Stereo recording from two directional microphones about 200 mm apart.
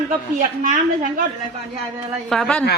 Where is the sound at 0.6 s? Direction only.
45° right (ahead or behind).